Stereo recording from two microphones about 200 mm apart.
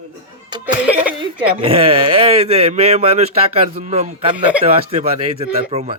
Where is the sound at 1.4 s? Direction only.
30° right (ahead or behind).